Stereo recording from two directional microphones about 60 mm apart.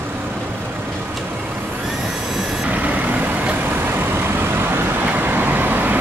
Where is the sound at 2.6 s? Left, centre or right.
Right.